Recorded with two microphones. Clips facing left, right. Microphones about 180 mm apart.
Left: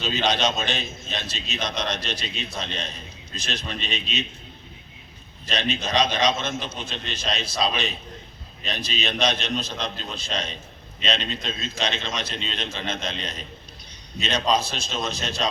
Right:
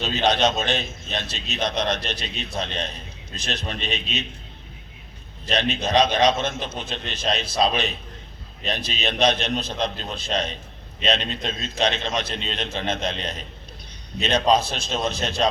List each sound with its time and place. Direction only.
0.3 s a man's voice: 60° right (ahead or behind)
5.5 s a man's voice: 60° right (ahead or behind)